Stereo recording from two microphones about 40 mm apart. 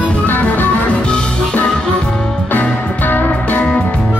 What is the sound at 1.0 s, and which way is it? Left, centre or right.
Music, left.